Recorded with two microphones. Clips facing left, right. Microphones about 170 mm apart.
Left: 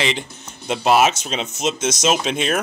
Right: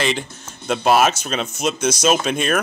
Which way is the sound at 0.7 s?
20° left (ahead or behind).